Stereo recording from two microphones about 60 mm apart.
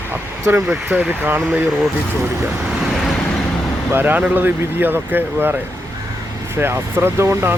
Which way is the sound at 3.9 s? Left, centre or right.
Right.